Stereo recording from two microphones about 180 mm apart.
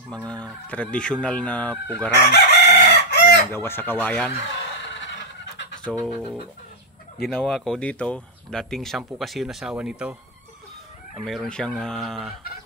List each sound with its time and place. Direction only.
0.1 s speech: 5° left (ahead or behind)
2.2 s chicken: 70° left (ahead or behind)
3.5 s speech: 10° left (ahead or behind)
4.8 s fowl: 85° left
5.9 s speech: 25° right (ahead or behind)
7.2 s speech: 5° left (ahead or behind)
11.2 s speech: 5° left (ahead or behind)